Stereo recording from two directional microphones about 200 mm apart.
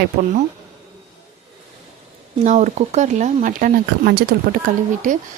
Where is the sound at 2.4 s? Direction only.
35° right (ahead or behind).